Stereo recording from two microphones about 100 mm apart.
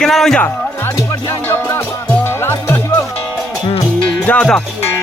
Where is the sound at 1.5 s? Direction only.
25° left (ahead or behind).